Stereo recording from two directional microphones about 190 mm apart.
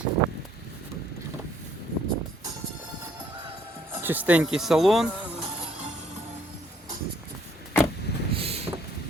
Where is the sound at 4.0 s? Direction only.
10° right (ahead or behind).